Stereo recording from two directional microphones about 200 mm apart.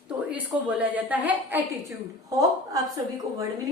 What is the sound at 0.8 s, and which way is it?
Speech, 10° right (ahead or behind).